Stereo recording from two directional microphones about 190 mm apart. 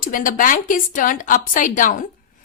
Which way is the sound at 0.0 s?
45° left (ahead or behind).